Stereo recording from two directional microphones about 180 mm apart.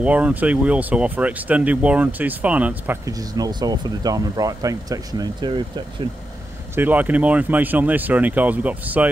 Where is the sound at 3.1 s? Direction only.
20° right (ahead or behind).